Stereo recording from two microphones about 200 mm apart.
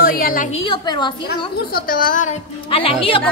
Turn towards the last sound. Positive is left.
turn(degrees=25)  # may be behind; listen again after turning